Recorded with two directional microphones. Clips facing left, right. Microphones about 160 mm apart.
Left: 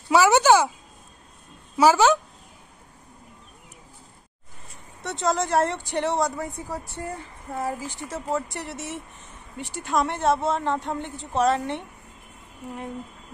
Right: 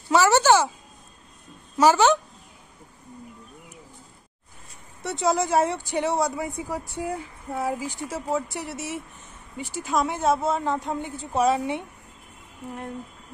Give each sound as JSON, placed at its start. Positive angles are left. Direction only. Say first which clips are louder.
{"t": 0.1, "sound": "a woman's voice", "louder": "left 1 dB", "side_deg": 10}
{"t": 1.8, "sound": "a woman's voice", "louder": "even", "side_deg": 10}
{"t": 5.0, "sound": "speech", "louder": "right 1 dB", "side_deg": -5}